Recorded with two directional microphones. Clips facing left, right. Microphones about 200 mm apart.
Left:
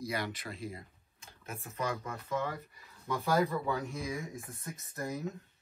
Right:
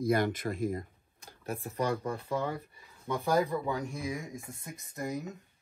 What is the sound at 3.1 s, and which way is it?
Speech, 15° right (ahead or behind).